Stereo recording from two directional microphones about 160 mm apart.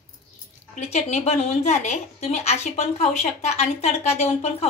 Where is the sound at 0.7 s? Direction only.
45° left (ahead or behind).